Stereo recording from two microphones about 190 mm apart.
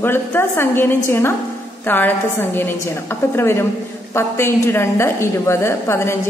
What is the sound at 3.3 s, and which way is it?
A woman's voice, 15° left (ahead or behind).